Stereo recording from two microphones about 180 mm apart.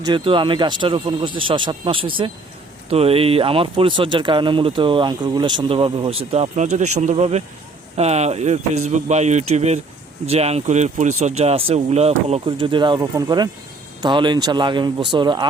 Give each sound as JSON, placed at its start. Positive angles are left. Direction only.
{"t": 0.0, "sound": "speech", "side_deg": -25}